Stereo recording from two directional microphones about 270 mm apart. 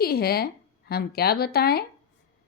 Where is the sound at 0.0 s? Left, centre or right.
Left.